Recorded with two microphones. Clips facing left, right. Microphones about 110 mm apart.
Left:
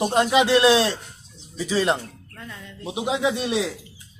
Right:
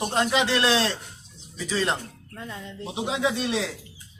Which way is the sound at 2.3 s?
20° right (ahead or behind).